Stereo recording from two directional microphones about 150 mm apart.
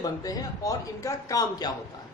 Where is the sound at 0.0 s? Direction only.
25° left (ahead or behind).